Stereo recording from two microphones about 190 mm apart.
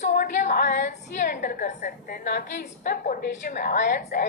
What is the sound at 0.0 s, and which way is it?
A woman's voice, 40° left (ahead or behind).